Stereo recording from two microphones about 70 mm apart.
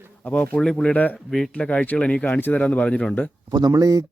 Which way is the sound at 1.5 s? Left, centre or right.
Centre.